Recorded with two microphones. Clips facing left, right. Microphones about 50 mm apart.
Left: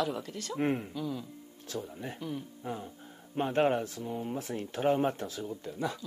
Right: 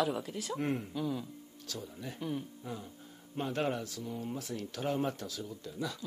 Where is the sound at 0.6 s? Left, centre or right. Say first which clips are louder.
Left 5 dB; left.